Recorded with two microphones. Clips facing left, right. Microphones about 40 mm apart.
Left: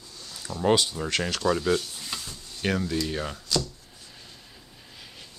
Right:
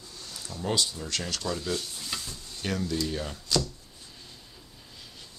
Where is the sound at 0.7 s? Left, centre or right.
Left.